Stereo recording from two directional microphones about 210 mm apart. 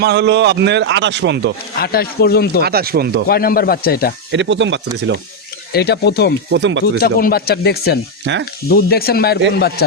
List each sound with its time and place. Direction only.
0.0 s a man's voice: 55° right (ahead or behind)
1.8 s speech: 45° left (ahead or behind)
2.6 s speech: 45° right (ahead or behind)
3.2 s speech: 45° left (ahead or behind)
4.3 s a man's voice: 60° right (ahead or behind)
5.7 s speech: 50° left (ahead or behind)
6.5 s a man's voice: 60° right (ahead or behind)
7.0 s speech: 45° left (ahead or behind)
8.3 s a man's voice: 60° right (ahead or behind)
8.7 s speech: 45° left (ahead or behind)